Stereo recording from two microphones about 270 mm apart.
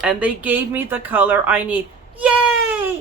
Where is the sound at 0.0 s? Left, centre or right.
Centre.